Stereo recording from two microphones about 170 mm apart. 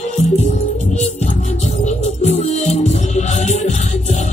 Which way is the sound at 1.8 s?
40° left (ahead or behind).